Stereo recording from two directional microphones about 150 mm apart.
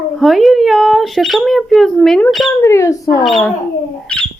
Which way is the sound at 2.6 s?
20° left (ahead or behind).